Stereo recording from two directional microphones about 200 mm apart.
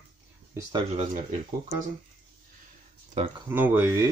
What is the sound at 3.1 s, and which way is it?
Speech, 30° right (ahead or behind).